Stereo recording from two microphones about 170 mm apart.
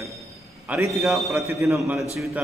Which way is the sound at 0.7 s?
10° right (ahead or behind).